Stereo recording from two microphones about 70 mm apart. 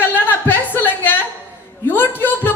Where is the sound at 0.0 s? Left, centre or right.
Left.